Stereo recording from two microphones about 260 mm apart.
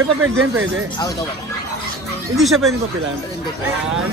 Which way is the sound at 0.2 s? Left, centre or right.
Right.